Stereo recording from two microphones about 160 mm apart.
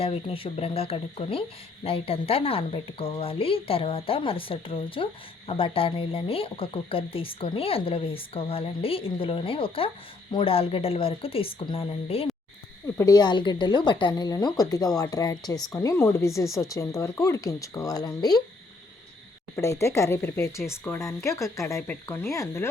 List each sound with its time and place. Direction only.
0.0 s speech: 35° left (ahead or behind)
13.0 s speech: 25° left (ahead or behind)
19.5 s speech: 20° left (ahead or behind)